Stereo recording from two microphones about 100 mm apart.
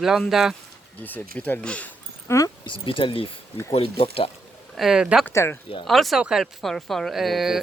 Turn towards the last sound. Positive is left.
turn(degrees=0)  # may be behind; listen again after turning